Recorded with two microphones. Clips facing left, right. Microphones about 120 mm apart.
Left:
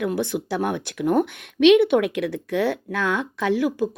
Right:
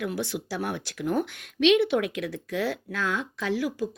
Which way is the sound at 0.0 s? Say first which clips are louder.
Left 6 dB; 55° left (ahead or behind).